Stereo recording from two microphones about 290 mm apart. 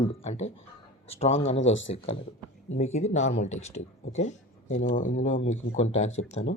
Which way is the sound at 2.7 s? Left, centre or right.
Left.